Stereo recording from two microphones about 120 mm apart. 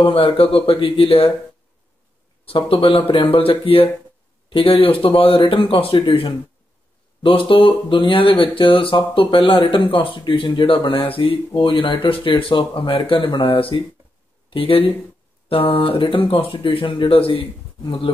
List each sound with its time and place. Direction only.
0.0 s speech: 50° left (ahead or behind)
2.4 s speech: 50° left (ahead or behind)